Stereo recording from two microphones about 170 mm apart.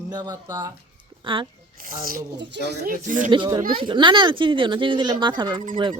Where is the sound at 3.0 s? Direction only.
50° right (ahead or behind).